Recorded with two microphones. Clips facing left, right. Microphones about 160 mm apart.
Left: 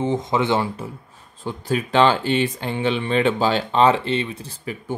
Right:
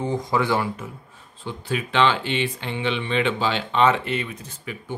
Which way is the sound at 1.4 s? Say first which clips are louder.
Left 4 dB; 40° left (ahead or behind).